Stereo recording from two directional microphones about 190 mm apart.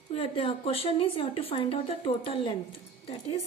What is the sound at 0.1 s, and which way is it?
Speech, 30° left (ahead or behind).